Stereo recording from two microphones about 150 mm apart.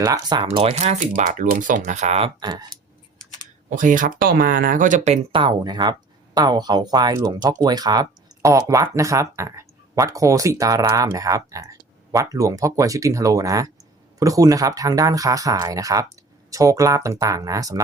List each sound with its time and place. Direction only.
0.0 s speech: 25° right (ahead or behind)
0.4 s speech: 40° right (ahead or behind)
2.4 s speech: 30° right (ahead or behind)
3.7 s speech: 60° right (ahead or behind)
5.3 s speech: 30° right (ahead or behind)